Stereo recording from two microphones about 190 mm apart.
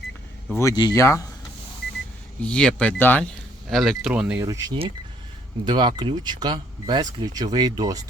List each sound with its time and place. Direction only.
0.5 s speech: 15° left (ahead or behind)
2.4 s speech: 5° left (ahead or behind)
4.4 s speech: 20° right (ahead or behind)